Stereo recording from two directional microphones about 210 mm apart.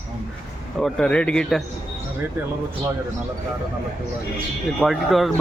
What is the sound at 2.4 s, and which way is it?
Speech, 10° right (ahead or behind).